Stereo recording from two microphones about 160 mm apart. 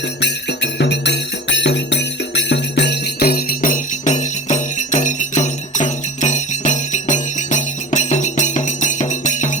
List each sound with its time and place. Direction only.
0.2 s music: 90° left; by 9.5 s 50° left (ahead or behind)